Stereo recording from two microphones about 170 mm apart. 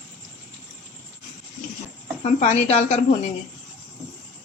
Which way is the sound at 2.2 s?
40° left (ahead or behind).